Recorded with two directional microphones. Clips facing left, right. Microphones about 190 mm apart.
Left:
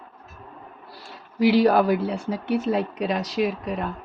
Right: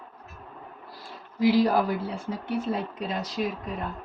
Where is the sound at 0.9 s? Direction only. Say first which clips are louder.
Left 1 dB; 70° left (ahead or behind).